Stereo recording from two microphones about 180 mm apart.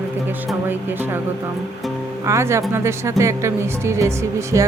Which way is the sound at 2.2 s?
15° right (ahead or behind).